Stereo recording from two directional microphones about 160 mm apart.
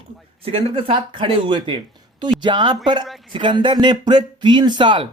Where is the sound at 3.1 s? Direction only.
Centre (ahead or behind).